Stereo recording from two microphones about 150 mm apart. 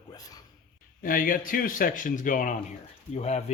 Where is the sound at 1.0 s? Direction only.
65° left (ahead or behind).